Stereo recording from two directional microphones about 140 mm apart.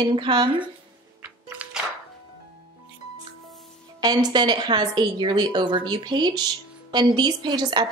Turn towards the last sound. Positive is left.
turn(degrees=-30)  # may be behind; listen again after turning